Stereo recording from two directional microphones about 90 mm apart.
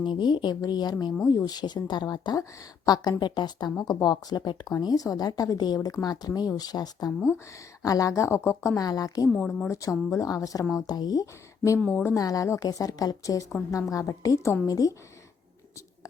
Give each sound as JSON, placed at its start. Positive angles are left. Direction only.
{"t": 0.0, "sound": "a woman's voice", "side_deg": 60}
{"t": 7.3, "sound": "a woman's voice", "side_deg": 35}
{"t": 8.8, "sound": "a woman's voice", "side_deg": 45}
{"t": 9.3, "sound": "a woman's voice", "side_deg": 10}
{"t": 9.6, "sound": "a woman's voice", "side_deg": 35}
{"t": 11.8, "sound": "a woman's voice", "side_deg": 15}
{"t": 12.1, "sound": "a woman's voice", "side_deg": 40}